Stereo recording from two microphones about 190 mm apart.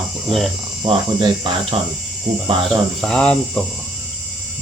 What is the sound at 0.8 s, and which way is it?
Speech, 25° right (ahead or behind).